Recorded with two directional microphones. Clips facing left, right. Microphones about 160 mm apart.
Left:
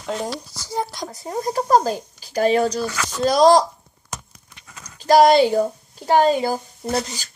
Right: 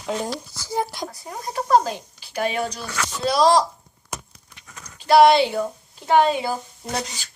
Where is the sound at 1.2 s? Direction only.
40° left (ahead or behind).